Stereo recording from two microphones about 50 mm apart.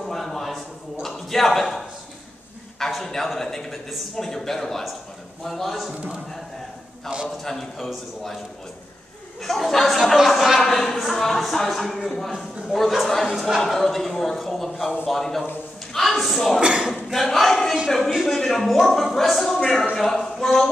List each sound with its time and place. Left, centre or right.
0.1 s a sound: centre
2.8 s a man's voice: centre
7.1 s speech: centre
7.4 s speech: centre
9.4 s speech: centre
16.6 s speech: centre
16.9 s a sound: centre
17.8 s speech: centre